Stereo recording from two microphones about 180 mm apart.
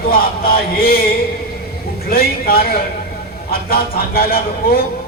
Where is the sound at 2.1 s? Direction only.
55° left (ahead or behind).